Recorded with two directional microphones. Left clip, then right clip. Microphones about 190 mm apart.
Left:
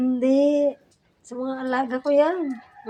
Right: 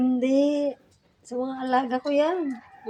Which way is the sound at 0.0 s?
5° left (ahead or behind).